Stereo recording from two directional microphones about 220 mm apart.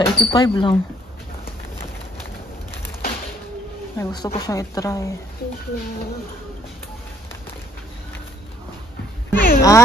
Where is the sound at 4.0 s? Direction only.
20° left (ahead or behind).